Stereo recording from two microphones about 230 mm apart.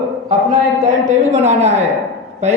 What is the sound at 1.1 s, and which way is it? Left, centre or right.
Speech, right.